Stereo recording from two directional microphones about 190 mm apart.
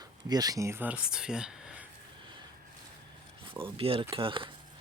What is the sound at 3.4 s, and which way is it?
Speech, 25° right (ahead or behind).